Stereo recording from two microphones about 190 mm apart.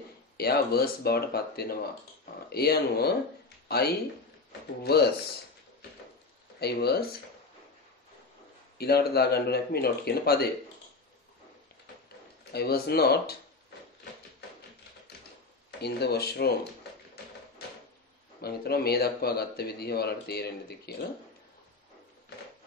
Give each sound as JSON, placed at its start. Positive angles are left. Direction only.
{"t": 0.4, "sound": "speech", "side_deg": 55}
{"t": 6.6, "sound": "speech", "side_deg": 55}
{"t": 8.7, "sound": "speech", "side_deg": 55}
{"t": 12.5, "sound": "speech", "side_deg": 55}
{"t": 15.8, "sound": "speech", "side_deg": 60}
{"t": 18.4, "sound": "speech", "side_deg": 55}